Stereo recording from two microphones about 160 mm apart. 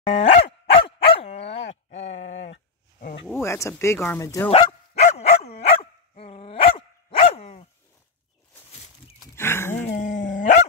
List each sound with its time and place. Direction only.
0.1 s dog: 40° left (ahead or behind)
3.4 s speech: 20° left (ahead or behind)
4.5 s dog: 40° left (ahead or behind)
9.2 s livestock: 15° left (ahead or behind)
9.9 s dog: 50° left (ahead or behind)